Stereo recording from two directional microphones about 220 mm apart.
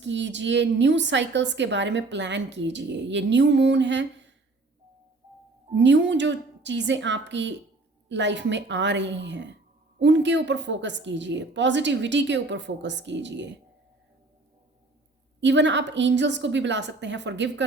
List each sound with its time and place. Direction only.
0.0 s a woman's voice: 55° right (ahead or behind)
5.7 s a woman's voice: 55° right (ahead or behind)
15.4 s a woman's voice: 55° right (ahead or behind)